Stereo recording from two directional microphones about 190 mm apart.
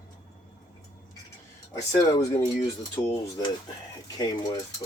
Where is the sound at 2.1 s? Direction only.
15° left (ahead or behind).